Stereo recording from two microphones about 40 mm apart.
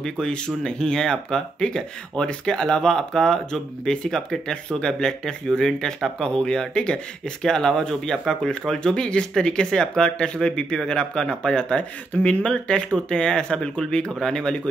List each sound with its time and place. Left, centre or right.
0.0 s speech: left
7.4 s speech: centre